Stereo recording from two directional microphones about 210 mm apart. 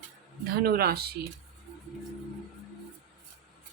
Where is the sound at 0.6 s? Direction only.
50° right (ahead or behind).